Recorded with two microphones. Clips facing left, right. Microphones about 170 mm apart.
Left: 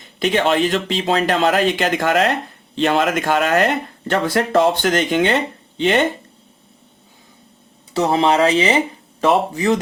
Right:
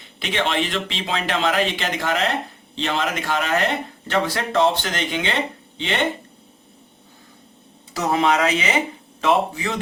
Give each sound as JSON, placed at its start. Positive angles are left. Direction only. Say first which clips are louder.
{"t": 0.2, "sound": "speech", "louder": "left 7 dB", "side_deg": 45}
{"t": 7.9, "sound": "speech", "louder": "left 4 dB", "side_deg": 30}